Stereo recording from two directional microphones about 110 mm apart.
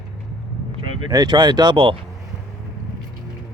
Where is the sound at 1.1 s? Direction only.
40° right (ahead or behind).